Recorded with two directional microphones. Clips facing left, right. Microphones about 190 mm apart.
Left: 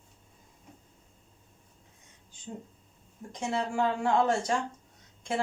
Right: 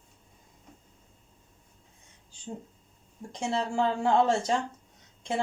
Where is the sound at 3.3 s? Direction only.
30° right (ahead or behind).